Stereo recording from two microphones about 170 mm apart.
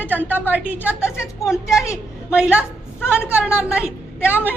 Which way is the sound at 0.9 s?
15° left (ahead or behind).